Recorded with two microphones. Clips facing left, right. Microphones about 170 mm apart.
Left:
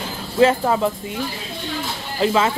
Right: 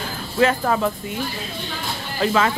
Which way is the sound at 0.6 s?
20° left (ahead or behind).